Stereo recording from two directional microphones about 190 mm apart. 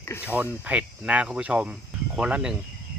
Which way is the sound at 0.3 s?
10° right (ahead or behind).